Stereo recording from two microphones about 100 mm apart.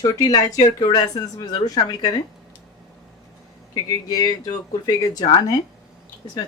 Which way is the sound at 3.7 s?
40° left (ahead or behind).